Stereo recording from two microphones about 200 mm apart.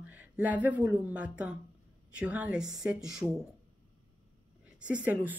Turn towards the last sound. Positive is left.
turn(degrees=-10)  # may be behind; listen again after turning